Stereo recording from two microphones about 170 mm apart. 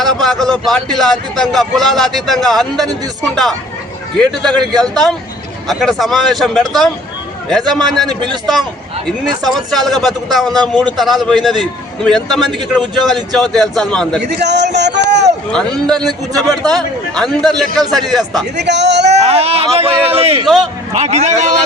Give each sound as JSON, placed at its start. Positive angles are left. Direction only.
{"t": 0.0, "sound": "a sound", "side_deg": 0}
{"t": 0.5, "sound": "a man's voice", "side_deg": 5}
{"t": 8.0, "sound": "a man's voice", "side_deg": -30}
{"t": 9.0, "sound": "a man's voice", "side_deg": 0}
{"t": 14.2, "sound": "speech", "side_deg": -85}
{"t": 15.4, "sound": "a man's voice", "side_deg": 5}
{"t": 18.5, "sound": "speech", "side_deg": -90}
{"t": 19.1, "sound": "a man's voice", "side_deg": -40}